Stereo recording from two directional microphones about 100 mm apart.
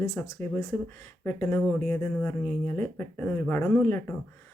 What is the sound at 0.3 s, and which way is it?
Speech, 25° left (ahead or behind).